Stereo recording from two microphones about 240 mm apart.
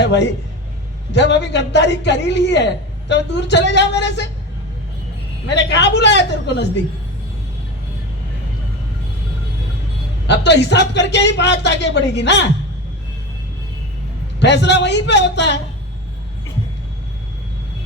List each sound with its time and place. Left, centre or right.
0.0 s speech: left
5.5 s speech: left
10.2 s speech: left
14.3 s speech: left